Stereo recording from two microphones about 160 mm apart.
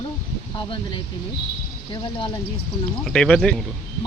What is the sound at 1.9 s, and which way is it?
Speech, 30° left (ahead or behind).